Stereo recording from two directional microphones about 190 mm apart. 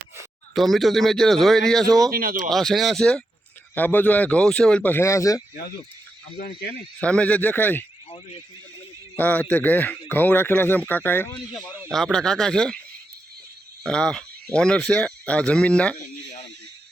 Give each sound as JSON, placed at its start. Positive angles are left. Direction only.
{"t": 0.5, "sound": "speech", "side_deg": 0}
{"t": 1.8, "sound": "speech", "side_deg": -20}
{"t": 2.1, "sound": "speech", "side_deg": -45}
{"t": 2.5, "sound": "a man's voice", "side_deg": 0}
{"t": 7.0, "sound": "a man's voice", "side_deg": 5}
{"t": 9.1, "sound": "a man's voice", "side_deg": 10}
{"t": 11.5, "sound": "speech", "side_deg": -10}
{"t": 11.9, "sound": "speech", "side_deg": 0}
{"t": 13.8, "sound": "speech", "side_deg": 5}